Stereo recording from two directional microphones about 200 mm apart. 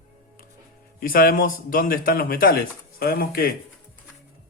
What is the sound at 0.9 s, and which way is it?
Speech, 45° left (ahead or behind).